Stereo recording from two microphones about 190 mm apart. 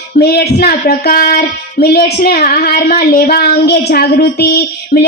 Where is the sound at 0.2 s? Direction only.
55° left (ahead or behind).